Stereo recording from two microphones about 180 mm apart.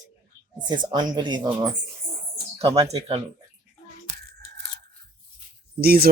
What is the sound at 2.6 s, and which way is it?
Speech, 35° right (ahead or behind).